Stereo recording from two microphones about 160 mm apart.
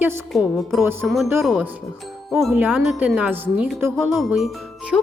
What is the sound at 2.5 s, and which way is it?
Speech, 10° right (ahead or behind).